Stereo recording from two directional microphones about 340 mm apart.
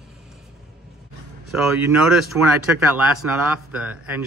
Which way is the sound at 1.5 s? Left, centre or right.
Centre.